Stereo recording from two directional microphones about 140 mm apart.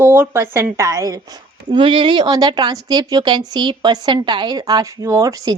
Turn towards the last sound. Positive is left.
turn(degrees=-25)  # may be behind; listen again after turning